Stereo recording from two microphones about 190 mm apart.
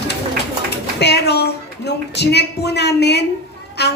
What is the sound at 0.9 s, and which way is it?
Speech, 60° left (ahead or behind).